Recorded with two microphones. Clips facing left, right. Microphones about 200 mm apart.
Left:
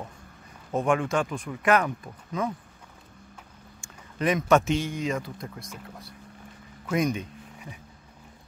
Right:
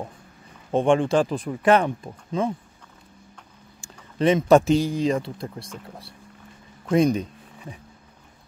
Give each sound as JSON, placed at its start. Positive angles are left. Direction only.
{"t": 0.7, "sound": "speech", "side_deg": -30}
{"t": 3.8, "sound": "speech", "side_deg": -30}
{"t": 6.9, "sound": "speech", "side_deg": -30}